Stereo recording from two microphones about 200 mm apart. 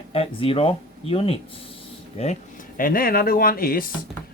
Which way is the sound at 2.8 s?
45° left (ahead or behind).